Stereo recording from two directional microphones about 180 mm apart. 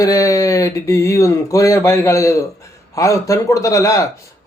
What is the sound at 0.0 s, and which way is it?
Speech, 20° left (ahead or behind).